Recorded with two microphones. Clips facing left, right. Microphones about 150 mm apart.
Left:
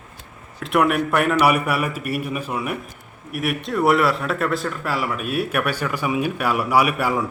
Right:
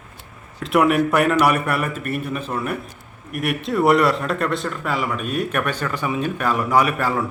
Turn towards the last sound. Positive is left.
turn(degrees=10)  # may be behind; listen again after turning